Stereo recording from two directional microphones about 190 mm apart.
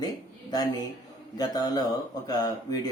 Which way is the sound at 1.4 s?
20° left (ahead or behind).